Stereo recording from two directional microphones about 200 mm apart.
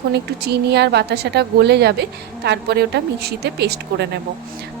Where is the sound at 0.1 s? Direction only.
55° right (ahead or behind).